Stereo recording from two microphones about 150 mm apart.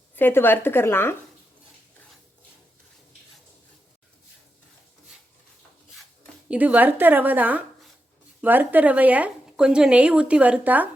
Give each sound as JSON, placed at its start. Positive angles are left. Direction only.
{"t": 0.2, "sound": "a woman's voice", "side_deg": 15}
{"t": 6.5, "sound": "a woman's voice", "side_deg": -10}